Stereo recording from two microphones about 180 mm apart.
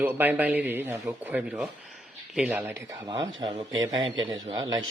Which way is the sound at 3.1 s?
25° right (ahead or behind).